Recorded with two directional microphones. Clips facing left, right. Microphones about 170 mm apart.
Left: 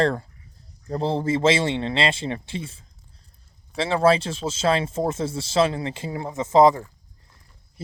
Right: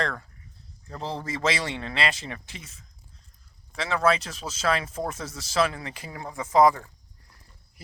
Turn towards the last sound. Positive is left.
turn(degrees=25)  # may be behind; listen again after turning